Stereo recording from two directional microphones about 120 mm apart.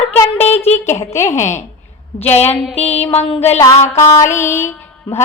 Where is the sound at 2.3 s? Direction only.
65° left (ahead or behind).